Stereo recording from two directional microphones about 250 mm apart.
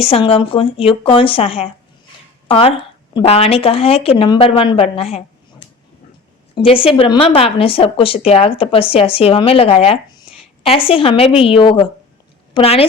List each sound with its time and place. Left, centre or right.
0.0 s a woman's voice: left